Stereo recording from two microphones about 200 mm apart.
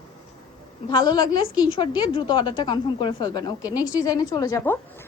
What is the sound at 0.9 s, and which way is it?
A woman's voice, 25° left (ahead or behind).